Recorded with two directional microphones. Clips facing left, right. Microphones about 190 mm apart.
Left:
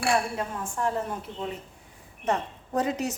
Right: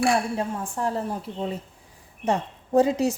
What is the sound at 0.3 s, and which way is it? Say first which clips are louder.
A woman's voice: right 3 dB; 35° right (ahead or behind).